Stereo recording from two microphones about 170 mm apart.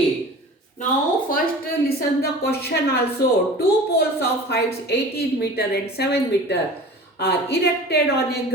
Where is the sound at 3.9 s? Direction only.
70° left (ahead or behind).